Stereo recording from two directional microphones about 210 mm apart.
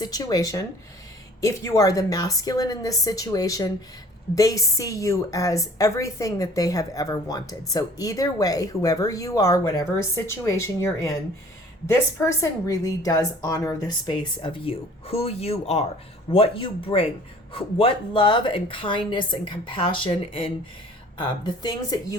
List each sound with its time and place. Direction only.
0.0 s a woman's voice: 15° left (ahead or behind)
12.1 s a woman's voice: 15° left (ahead or behind)